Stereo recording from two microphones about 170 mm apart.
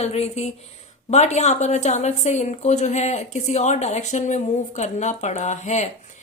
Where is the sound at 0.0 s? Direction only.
40° left (ahead or behind).